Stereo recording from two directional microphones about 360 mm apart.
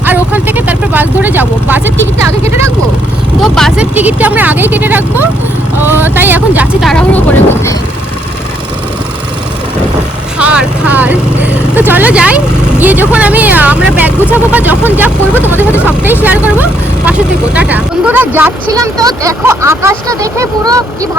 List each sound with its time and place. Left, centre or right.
0.0 s speech: centre
3.4 s speech: centre
10.3 s speech: centre
14.2 s speech: centre
14.5 s speech: centre
16.2 s speech: centre